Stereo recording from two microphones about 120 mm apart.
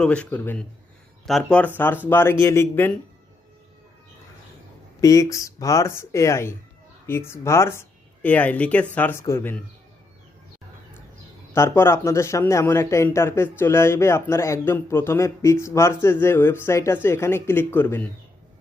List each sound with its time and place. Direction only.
0.0 s speech: 10° left (ahead or behind)
4.9 s speech: 30° left (ahead or behind)
11.5 s speech: 20° left (ahead or behind)